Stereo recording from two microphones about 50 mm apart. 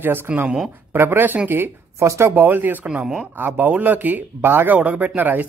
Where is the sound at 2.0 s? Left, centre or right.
Right.